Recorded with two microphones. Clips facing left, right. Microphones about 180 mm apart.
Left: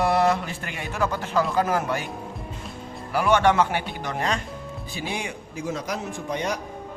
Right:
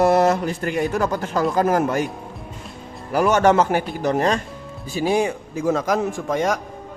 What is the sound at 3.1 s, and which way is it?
A man's voice, 40° right (ahead or behind).